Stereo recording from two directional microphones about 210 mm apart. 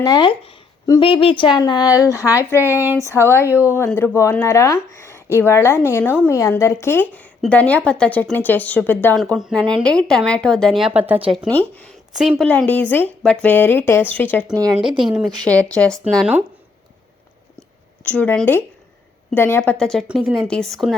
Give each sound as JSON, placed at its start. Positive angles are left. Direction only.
{"t": 0.0, "sound": "a woman's voice", "side_deg": 20}
{"t": 2.6, "sound": "speech", "side_deg": -10}
{"t": 3.0, "sound": "a woman's voice", "side_deg": 15}
{"t": 11.2, "sound": "speech", "side_deg": -20}
{"t": 12.1, "sound": "a woman's voice", "side_deg": 0}
{"t": 14.5, "sound": "speech", "side_deg": -15}
{"t": 14.8, "sound": "speech", "side_deg": 0}
{"t": 17.6, "sound": "a sound", "side_deg": 5}
{"t": 19.3, "sound": "speech", "side_deg": 10}